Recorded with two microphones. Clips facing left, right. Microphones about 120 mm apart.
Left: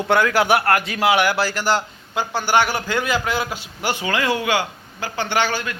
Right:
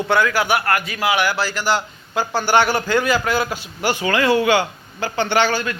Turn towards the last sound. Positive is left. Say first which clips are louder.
# right 3 dB
turn(degrees=10)  # may be behind; listen again after turning